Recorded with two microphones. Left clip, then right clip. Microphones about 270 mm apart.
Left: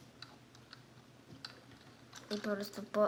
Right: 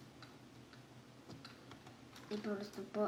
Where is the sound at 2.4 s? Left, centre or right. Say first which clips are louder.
Left 6 dB; left.